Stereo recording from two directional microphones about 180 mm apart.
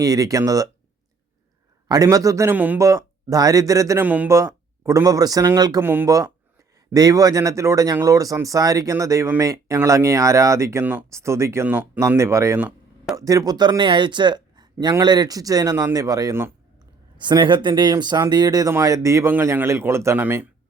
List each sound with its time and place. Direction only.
0.0 s speech: 20° right (ahead or behind)
1.9 s speech: 20° right (ahead or behind)